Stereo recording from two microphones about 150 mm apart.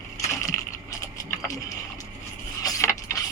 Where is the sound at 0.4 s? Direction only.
20° left (ahead or behind).